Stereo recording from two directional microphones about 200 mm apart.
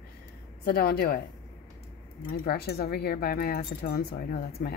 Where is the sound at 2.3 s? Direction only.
55° left (ahead or behind).